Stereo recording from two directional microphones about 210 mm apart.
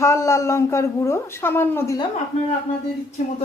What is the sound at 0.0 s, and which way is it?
A woman's voice, 15° left (ahead or behind).